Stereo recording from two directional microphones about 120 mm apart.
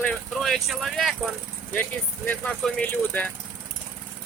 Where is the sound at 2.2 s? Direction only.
15° left (ahead or behind).